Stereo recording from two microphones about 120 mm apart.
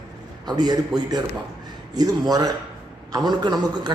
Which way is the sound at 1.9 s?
30° right (ahead or behind).